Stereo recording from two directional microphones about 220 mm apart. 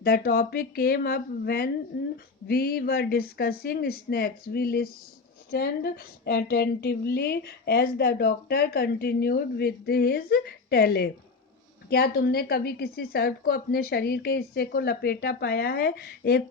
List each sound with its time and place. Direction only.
0.0 s a woman's voice: 45° left (ahead or behind)